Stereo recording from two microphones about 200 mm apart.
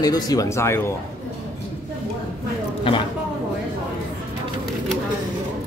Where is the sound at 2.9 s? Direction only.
25° left (ahead or behind).